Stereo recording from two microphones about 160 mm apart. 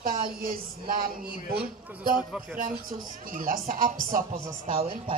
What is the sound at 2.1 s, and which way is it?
Speech, 5° right (ahead or behind).